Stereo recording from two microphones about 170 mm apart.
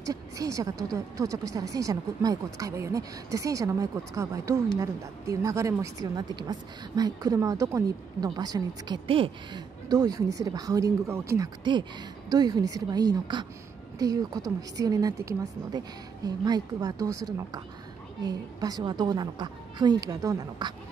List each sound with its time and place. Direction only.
0.0 s a woman's voice: 20° right (ahead or behind)